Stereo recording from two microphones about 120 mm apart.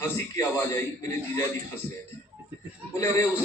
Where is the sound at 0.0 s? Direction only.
20° left (ahead or behind).